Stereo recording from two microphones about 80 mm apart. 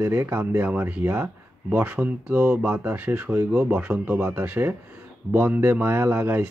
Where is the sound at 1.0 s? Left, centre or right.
Right.